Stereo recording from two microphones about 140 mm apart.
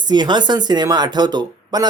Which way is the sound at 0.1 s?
30° right (ahead or behind).